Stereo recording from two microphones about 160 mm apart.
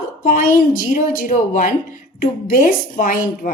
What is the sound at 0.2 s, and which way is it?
A woman's voice, 60° left (ahead or behind).